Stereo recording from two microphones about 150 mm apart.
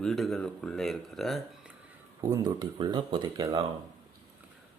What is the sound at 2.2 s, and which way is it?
Speech, 25° right (ahead or behind).